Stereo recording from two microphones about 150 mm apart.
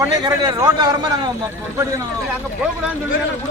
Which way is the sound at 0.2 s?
25° right (ahead or behind).